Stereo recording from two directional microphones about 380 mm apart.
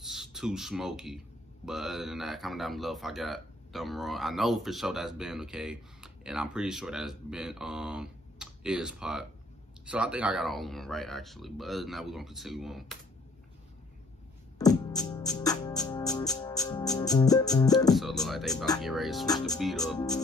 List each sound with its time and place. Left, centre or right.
0.0 s speech: centre
14.6 s music: centre
19.2 s speech: centre